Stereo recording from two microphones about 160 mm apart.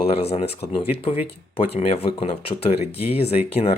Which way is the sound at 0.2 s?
40° left (ahead or behind).